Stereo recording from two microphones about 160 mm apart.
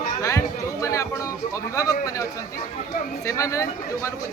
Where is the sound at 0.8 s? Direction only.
20° left (ahead or behind).